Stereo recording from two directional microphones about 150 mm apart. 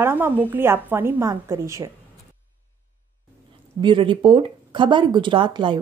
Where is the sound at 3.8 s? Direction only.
35° right (ahead or behind).